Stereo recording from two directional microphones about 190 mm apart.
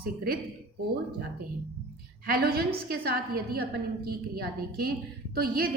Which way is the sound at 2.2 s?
55° right (ahead or behind).